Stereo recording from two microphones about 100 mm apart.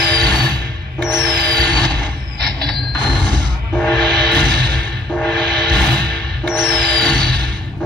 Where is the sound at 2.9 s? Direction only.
45° right (ahead or behind).